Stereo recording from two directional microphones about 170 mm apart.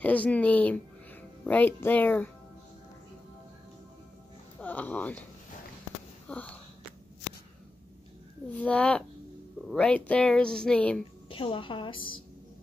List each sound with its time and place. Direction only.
0.0 s speech: 10° left (ahead or behind)
4.6 s speech: 10° left (ahead or behind)
6.2 s speech: 10° left (ahead or behind)
8.5 s speech: 5° left (ahead or behind)
11.2 s a woman's voice: 30° left (ahead or behind)